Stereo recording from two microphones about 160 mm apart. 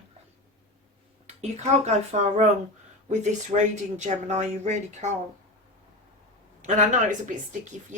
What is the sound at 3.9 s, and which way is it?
Speech, 45° right (ahead or behind).